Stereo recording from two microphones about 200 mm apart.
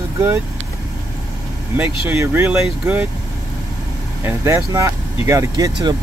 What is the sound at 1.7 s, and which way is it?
Speech, 10° right (ahead or behind).